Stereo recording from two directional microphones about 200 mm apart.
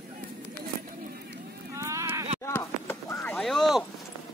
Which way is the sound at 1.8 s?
15° right (ahead or behind).